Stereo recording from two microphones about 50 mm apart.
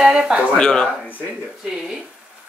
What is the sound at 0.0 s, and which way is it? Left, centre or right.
Speech, centre.